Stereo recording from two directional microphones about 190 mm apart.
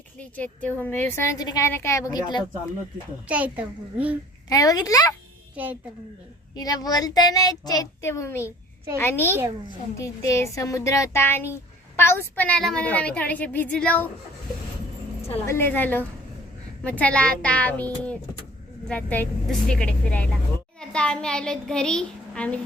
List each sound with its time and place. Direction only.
0.2 s a woman's voice: 10° left (ahead or behind)
3.2 s a child's voice: 5° right (ahead or behind)
4.4 s a child's voice: 20° left (ahead or behind)
6.6 s a child's voice: 20° left (ahead or behind)
15.4 s a woman's voice: 10° left (ahead or behind)